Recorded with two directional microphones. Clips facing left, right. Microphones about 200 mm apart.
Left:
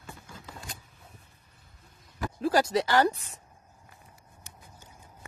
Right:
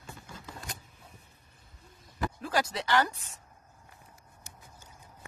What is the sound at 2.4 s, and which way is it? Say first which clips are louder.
Speech: left 8 dB; 35° left (ahead or behind).